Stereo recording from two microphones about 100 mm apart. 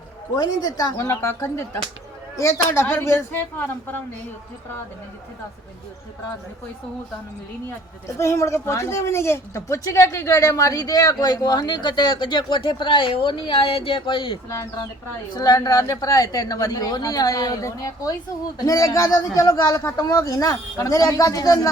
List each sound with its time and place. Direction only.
0.3 s a woman's voice: 40° left (ahead or behind); by 4.0 s 20° left (ahead or behind)
8.2 s speech: 30° left (ahead or behind); by 14.3 s 55° left (ahead or behind)
15.3 s speech: 40° left (ahead or behind)